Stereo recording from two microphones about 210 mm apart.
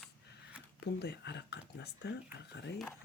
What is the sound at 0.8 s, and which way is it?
Speech, 50° left (ahead or behind).